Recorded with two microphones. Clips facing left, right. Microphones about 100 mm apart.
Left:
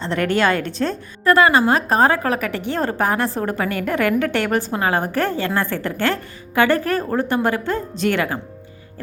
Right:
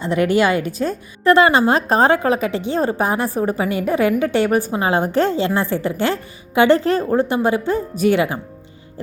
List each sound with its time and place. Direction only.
0.0 s a woman's voice: 10° right (ahead or behind)
1.2 s a woman's voice: 25° right (ahead or behind)